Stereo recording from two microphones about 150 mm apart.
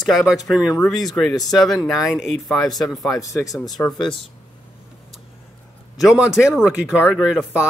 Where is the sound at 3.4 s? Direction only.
25° left (ahead or behind).